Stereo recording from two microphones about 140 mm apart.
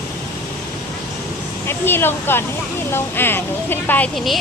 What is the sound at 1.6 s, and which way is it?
Speech, 15° left (ahead or behind).